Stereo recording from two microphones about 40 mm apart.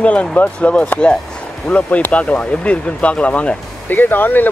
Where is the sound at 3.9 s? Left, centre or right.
Left.